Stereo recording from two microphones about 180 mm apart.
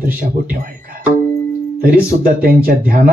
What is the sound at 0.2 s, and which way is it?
Speech, 50° right (ahead or behind).